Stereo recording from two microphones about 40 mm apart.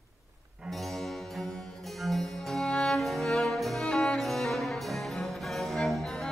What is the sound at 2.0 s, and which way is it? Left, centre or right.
Music, centre.